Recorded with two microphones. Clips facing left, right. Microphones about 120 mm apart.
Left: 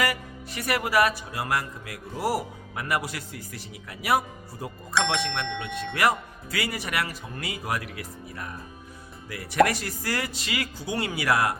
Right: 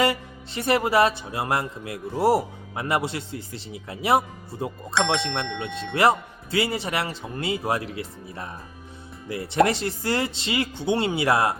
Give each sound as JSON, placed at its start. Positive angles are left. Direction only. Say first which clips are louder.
{"t": 0.0, "sound": "speech", "louder": "right 5 dB", "side_deg": -25}